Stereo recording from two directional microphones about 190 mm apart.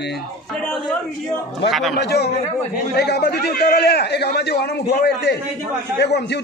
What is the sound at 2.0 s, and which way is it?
A man's voice, 60° left (ahead or behind).